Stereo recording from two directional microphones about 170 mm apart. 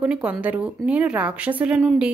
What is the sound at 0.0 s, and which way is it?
A woman's voice, 5° right (ahead or behind).